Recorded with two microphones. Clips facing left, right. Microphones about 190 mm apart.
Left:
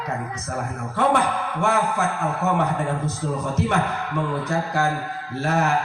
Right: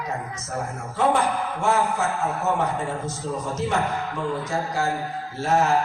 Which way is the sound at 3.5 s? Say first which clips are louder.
Left 1 dB; 60° left (ahead or behind).